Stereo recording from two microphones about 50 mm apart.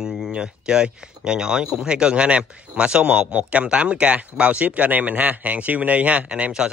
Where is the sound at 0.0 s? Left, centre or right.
Centre.